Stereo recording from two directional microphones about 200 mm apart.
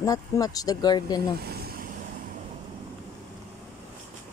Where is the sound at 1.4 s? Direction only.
50° right (ahead or behind).